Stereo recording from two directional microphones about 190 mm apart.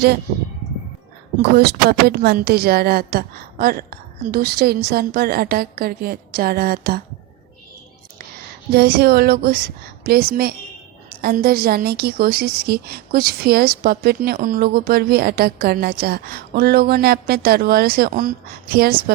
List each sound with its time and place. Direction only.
1.4 s a woman's voice: 55° right (ahead or behind)
8.7 s a woman's voice: 55° right (ahead or behind)